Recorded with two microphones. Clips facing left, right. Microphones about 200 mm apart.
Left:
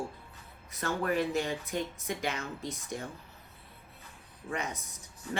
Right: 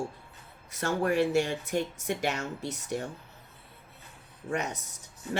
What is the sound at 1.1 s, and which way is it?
Speech, 75° right (ahead or behind).